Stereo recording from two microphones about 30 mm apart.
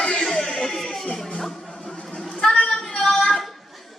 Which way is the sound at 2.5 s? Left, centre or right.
Left.